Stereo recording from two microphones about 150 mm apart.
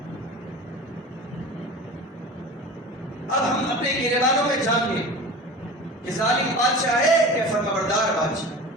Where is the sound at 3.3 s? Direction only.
Centre (ahead or behind).